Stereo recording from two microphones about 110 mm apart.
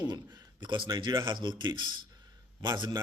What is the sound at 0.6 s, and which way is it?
A man's voice, 45° right (ahead or behind).